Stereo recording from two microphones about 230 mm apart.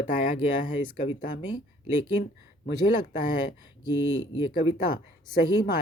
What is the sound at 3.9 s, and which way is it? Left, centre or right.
Speech, left.